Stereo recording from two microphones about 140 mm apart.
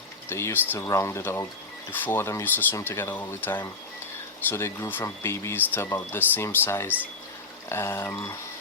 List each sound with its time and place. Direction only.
0.3 s speech: 20° left (ahead or behind)